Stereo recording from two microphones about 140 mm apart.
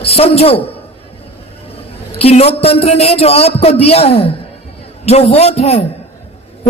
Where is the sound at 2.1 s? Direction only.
45° left (ahead or behind).